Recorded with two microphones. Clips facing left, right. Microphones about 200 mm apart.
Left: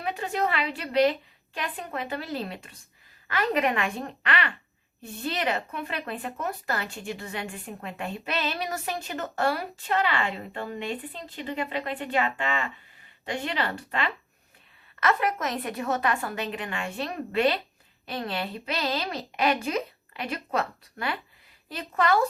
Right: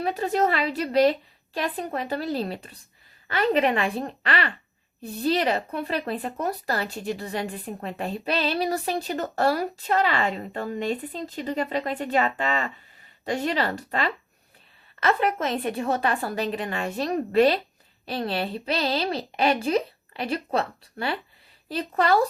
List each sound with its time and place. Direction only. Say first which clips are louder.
0.0 s speech: right 5 dB; 35° right (ahead or behind)